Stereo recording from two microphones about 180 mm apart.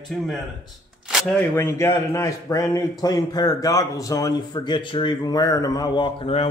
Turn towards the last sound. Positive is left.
turn(degrees=30)  # may be behind; listen again after turning